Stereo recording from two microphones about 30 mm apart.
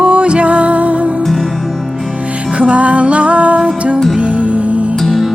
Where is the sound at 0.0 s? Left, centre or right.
Right.